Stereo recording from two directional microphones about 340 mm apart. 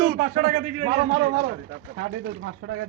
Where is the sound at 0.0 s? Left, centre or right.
Right.